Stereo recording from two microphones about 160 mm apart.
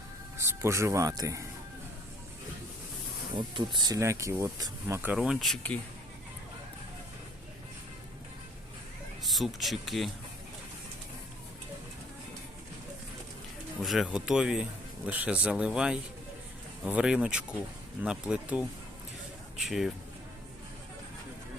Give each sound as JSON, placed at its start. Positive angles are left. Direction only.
{"t": 0.3, "sound": "speech", "side_deg": -15}
{"t": 3.3, "sound": "speech", "side_deg": -30}
{"t": 5.1, "sound": "speech", "side_deg": 0}
{"t": 9.2, "sound": "speech", "side_deg": 0}
{"t": 13.8, "sound": "speech", "side_deg": 0}